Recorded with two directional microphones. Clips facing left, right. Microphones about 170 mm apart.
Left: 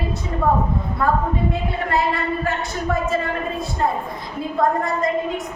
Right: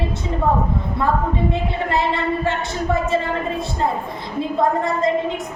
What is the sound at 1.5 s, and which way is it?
A woman's voice, 25° right (ahead or behind).